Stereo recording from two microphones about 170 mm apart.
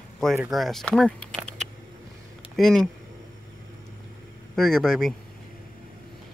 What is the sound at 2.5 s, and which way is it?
Speech, centre (ahead or behind).